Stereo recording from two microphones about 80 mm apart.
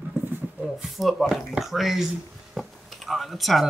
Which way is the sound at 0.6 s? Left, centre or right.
Centre.